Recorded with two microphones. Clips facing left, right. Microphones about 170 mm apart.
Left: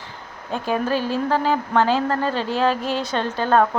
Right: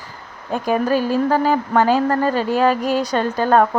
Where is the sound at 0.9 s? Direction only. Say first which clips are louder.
Right 4 dB; 45° right (ahead or behind).